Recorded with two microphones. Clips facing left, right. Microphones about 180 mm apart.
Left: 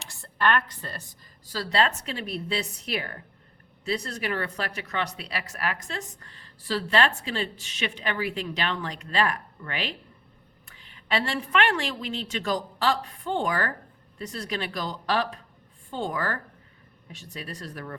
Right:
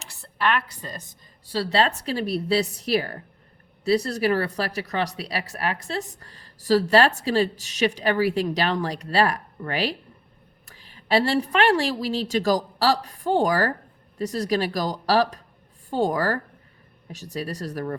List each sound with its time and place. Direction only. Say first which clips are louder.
0.2 s a sound: even; centre (ahead or behind)
0.8 s a woman's voice: right 2 dB; 15° right (ahead or behind)
1.5 s speech: right 3 dB; 30° right (ahead or behind)